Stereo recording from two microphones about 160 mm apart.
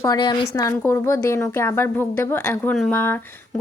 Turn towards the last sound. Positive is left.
turn(degrees=10)  # may be behind; listen again after turning